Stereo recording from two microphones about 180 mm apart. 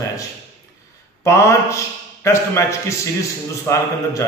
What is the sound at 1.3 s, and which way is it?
A man's voice, 15° left (ahead or behind).